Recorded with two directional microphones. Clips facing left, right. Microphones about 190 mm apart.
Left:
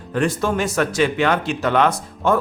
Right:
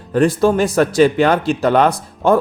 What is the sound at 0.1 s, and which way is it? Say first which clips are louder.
Speech: right 7 dB; 35° right (ahead or behind).